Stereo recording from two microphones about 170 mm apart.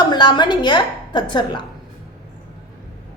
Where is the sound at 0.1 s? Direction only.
25° left (ahead or behind).